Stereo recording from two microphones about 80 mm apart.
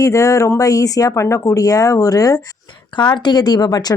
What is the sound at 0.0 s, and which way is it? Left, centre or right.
Speech, left.